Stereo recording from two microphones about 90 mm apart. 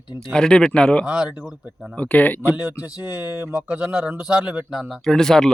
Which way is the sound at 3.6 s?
15° right (ahead or behind).